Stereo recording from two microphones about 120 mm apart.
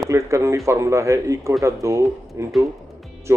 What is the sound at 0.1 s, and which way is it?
A man's voice, 25° right (ahead or behind).